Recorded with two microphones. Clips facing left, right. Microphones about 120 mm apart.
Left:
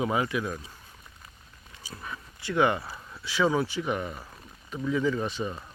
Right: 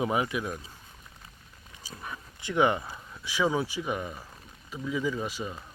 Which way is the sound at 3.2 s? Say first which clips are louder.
Left 2 dB; 15° right (ahead or behind).